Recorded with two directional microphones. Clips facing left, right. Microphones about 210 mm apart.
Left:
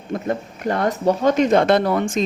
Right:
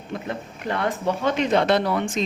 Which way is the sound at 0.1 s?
45° left (ahead or behind).